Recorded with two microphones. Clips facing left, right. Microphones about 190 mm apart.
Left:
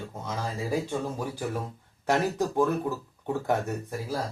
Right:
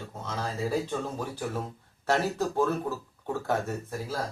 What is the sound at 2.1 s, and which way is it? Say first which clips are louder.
Speech: left 1 dB; 15° left (ahead or behind).